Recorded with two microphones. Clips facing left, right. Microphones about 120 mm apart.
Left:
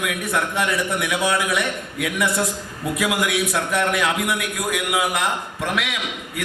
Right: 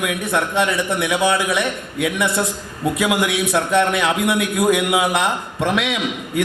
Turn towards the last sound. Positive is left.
turn(degrees=-25)  # may be behind; listen again after turning